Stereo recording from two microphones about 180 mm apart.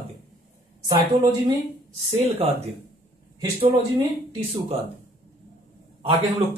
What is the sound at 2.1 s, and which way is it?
Speech, 35° right (ahead or behind).